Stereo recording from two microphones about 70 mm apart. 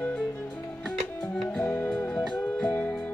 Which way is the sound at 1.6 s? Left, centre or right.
Left.